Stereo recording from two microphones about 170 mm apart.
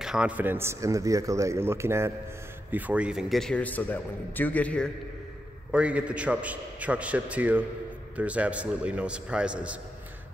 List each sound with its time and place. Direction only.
0.0 s a man's voice: 5° right (ahead or behind)
5.7 s speech: 5° right (ahead or behind)